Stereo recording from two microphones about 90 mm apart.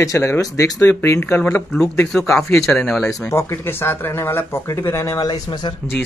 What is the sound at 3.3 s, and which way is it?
Speech, 25° left (ahead or behind).